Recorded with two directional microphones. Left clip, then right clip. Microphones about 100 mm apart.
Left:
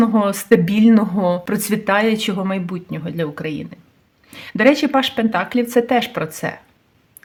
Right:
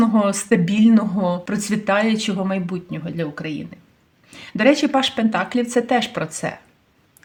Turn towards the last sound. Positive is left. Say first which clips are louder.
# left 2 dB
turn(degrees=25)  # may be behind; listen again after turning